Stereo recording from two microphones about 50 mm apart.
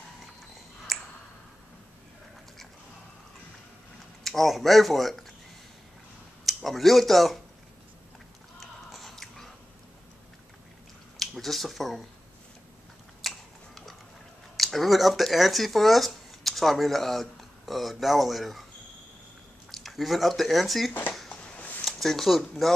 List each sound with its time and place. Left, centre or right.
0.9 s a sound: centre
4.2 s speech: centre
6.4 s speech: centre
8.5 s biting: centre
11.1 s speech: centre
13.2 s a sound: centre
14.6 s speech: centre
19.7 s speech: centre
21.5 s a sound: left
21.8 s speech: centre